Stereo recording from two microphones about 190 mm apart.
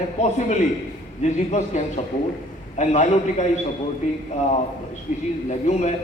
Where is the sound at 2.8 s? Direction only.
35° left (ahead or behind).